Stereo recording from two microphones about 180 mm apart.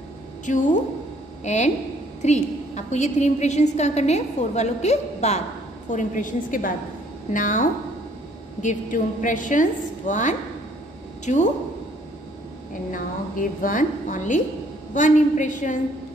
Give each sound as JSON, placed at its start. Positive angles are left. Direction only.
{"t": 0.5, "sound": "a woman's voice", "side_deg": 45}
{"t": 12.9, "sound": "a woman's voice", "side_deg": 50}